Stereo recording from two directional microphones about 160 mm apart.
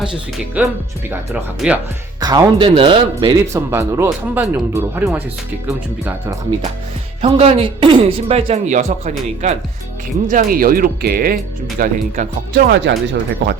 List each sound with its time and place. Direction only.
0.6 s speech: 10° right (ahead or behind)
2.2 s speech: 25° right (ahead or behind)
3.7 s speech: 15° right (ahead or behind)
7.2 s speech: 35° right (ahead or behind)
10.2 s speech: 60° right (ahead or behind)
11.8 s speech: 55° right (ahead or behind)
12.6 s speech: 90° right